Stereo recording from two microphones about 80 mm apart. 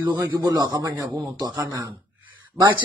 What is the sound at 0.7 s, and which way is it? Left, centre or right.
Speech, right.